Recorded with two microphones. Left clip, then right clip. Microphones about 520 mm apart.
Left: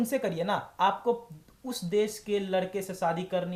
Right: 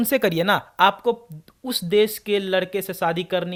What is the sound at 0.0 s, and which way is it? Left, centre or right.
A man's voice, right.